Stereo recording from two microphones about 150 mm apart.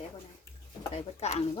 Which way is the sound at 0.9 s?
45° left (ahead or behind).